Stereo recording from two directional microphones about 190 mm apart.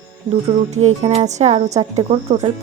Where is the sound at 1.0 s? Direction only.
35° right (ahead or behind).